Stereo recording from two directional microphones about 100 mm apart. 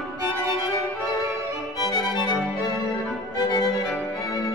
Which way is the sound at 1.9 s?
45° left (ahead or behind).